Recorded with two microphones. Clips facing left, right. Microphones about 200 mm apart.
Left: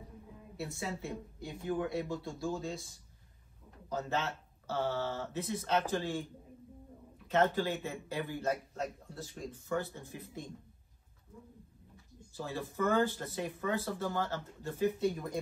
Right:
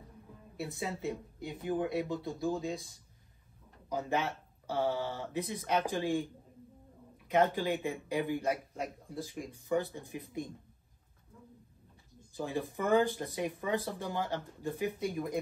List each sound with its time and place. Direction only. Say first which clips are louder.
0.6 s speech: right 2 dB; 20° right (ahead or behind)
3.9 s speech: right 2 dB; 15° right (ahead or behind)
7.2 s speech: right 1 dB; 15° right (ahead or behind)
12.4 s speech: right 1 dB; 15° right (ahead or behind)